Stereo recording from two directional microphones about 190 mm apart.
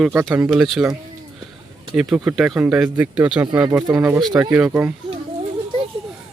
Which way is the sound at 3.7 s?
20° right (ahead or behind).